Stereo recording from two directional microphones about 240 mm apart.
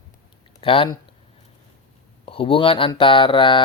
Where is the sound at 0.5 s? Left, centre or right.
Left.